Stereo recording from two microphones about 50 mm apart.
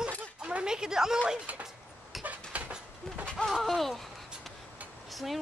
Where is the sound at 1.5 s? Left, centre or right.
Right.